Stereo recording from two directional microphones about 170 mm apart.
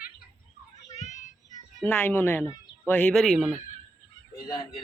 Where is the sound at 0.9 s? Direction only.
45° left (ahead or behind).